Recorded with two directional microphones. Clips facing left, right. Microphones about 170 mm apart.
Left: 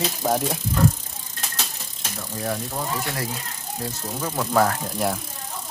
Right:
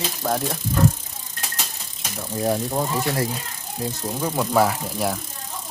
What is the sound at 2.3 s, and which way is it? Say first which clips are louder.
Speech: right 6 dB; 25° right (ahead or behind).